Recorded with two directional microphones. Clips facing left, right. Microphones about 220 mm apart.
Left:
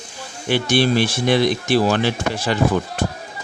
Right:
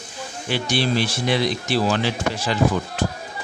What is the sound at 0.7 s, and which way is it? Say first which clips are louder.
Speech: left 4 dB; 50° left (ahead or behind).